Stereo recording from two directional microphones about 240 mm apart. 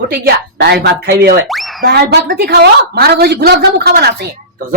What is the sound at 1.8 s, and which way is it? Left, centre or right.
A woman's voice, right.